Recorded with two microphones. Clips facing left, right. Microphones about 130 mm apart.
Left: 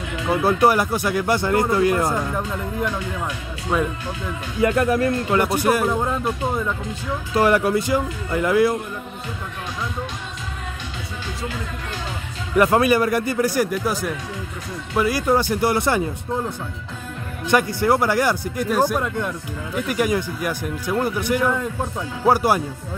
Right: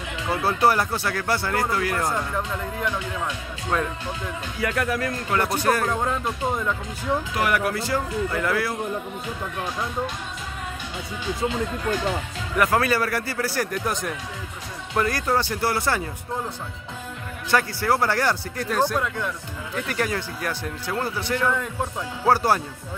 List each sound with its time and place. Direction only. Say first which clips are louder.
0.3 s speech: left 4 dB; 15° left (ahead or behind)
4.6 s speech: left 7 dB; 25° left (ahead or behind)
5.6 s speech: left 3 dB; 10° left (ahead or behind)
7.3 s speech: left 10 dB; 30° left (ahead or behind)
12.5 s speech: left 5 dB; 20° left (ahead or behind)
17.5 s speech: left 4 dB; 20° left (ahead or behind)